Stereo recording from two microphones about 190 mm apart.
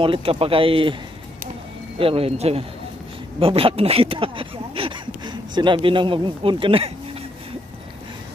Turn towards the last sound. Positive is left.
turn(degrees=-30)  # may be behind; listen again after turning